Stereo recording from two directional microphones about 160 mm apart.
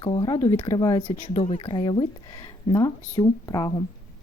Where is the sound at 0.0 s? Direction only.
30° left (ahead or behind).